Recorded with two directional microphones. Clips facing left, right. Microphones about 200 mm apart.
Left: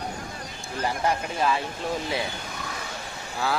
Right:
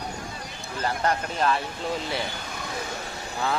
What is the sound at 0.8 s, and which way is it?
Speech, 10° left (ahead or behind).